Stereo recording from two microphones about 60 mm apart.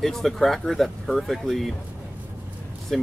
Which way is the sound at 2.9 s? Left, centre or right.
Centre.